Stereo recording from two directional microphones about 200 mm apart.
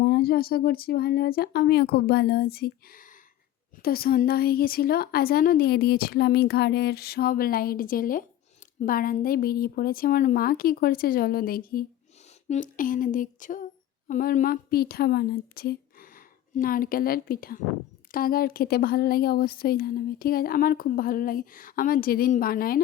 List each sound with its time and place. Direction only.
0.0 s speech: 50° left (ahead or behind)
12.5 s a sound: 40° left (ahead or behind)
14.1 s a woman's voice: 45° left (ahead or behind)